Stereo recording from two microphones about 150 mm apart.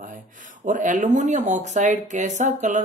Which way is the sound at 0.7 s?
60° right (ahead or behind).